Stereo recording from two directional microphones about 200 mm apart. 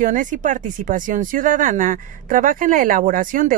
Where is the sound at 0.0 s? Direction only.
40° right (ahead or behind).